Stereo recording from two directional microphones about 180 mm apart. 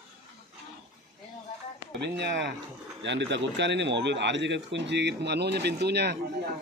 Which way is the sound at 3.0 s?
80° right.